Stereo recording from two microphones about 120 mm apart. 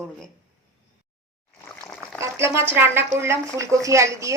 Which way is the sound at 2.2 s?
20° right (ahead or behind).